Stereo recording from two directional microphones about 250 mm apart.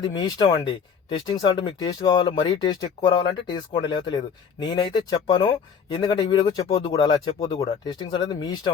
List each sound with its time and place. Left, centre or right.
0.0 s speech: centre